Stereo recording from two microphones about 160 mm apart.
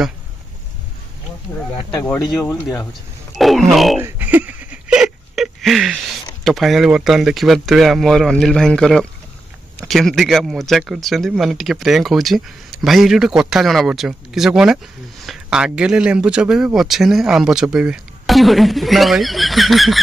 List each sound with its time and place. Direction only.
2.0 s speech: 15° left (ahead or behind)
2.9 s speech: centre (ahead or behind)
4.0 s a sound: 10° right (ahead or behind)
6.4 s speech: centre (ahead or behind)